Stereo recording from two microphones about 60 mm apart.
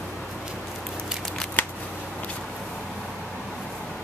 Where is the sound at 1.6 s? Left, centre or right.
Left.